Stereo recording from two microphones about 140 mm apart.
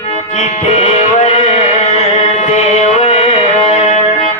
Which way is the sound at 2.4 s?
50° left (ahead or behind).